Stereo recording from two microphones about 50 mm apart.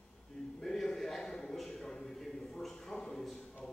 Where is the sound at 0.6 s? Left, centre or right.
Centre.